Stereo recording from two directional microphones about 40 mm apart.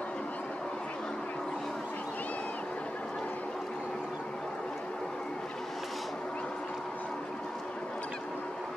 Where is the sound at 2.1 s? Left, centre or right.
Left.